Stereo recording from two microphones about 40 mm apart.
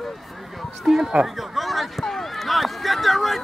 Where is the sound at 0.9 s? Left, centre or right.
Centre.